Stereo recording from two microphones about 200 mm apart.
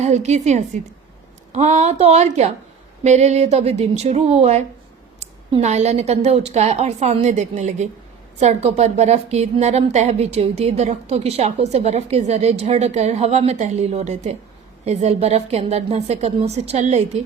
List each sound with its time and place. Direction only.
0.0 s a woman's voice: 35° right (ahead or behind)